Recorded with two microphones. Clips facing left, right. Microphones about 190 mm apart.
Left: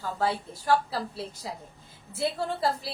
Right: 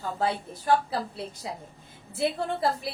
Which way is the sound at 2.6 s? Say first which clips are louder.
Right 1 dB; 20° right (ahead or behind).